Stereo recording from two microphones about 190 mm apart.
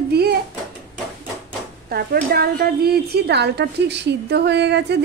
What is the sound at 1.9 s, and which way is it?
A woman's voice, 55° right (ahead or behind).